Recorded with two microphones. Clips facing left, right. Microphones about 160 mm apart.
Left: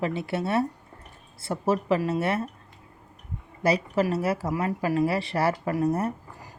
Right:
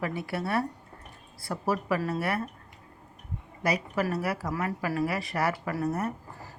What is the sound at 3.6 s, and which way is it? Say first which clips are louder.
Speech: left 5 dB; 30° left (ahead or behind).